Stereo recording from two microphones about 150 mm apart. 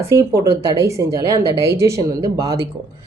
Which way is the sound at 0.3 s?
20° right (ahead or behind).